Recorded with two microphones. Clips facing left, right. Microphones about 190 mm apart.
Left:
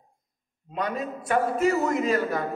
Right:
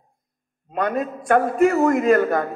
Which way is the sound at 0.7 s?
55° right (ahead or behind).